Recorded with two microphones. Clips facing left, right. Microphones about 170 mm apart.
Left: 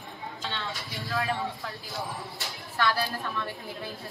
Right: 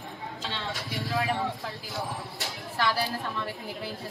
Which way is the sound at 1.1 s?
20° right (ahead or behind).